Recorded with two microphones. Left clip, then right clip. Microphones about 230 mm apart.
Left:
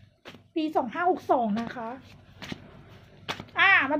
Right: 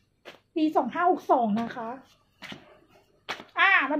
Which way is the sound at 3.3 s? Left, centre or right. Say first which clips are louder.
Left 1 dB; left.